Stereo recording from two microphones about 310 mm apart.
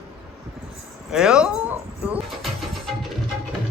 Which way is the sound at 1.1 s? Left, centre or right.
Centre.